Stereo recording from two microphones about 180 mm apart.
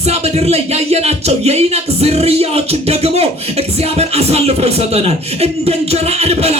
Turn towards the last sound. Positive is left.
turn(degrees=-35)  # may be behind; listen again after turning